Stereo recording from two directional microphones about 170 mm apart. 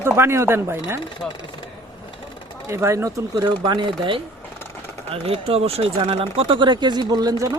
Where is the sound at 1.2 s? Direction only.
5° left (ahead or behind).